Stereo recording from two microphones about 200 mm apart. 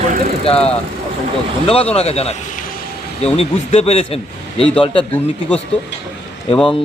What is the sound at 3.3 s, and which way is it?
Speech, 35° left (ahead or behind).